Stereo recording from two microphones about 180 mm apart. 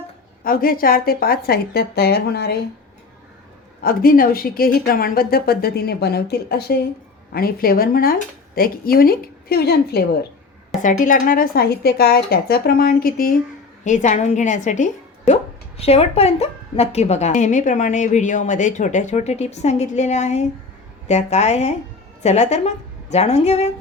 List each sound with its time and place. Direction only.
0.4 s a woman's voice: 55° left (ahead or behind)
3.8 s a woman's voice: 55° left (ahead or behind)
11.0 s a woman's voice: 50° left (ahead or behind)
13.8 s a woman's voice: 40° left (ahead or behind)